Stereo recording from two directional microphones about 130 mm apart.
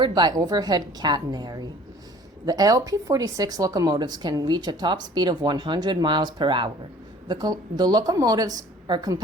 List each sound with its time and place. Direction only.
0.0 s speech: 35° right (ahead or behind)